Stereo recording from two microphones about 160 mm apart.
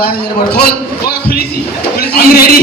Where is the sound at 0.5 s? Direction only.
75° left (ahead or behind).